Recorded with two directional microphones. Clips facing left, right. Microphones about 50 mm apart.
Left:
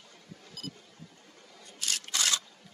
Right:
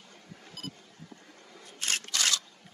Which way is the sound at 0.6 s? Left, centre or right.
Right.